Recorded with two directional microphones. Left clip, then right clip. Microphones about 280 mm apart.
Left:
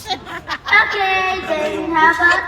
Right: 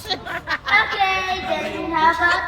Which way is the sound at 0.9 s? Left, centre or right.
Centre.